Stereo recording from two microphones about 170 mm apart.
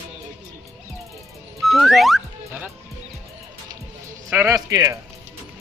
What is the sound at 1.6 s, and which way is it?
Music, centre (ahead or behind).